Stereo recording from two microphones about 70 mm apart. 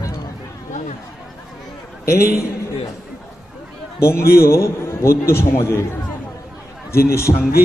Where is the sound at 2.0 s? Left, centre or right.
Left.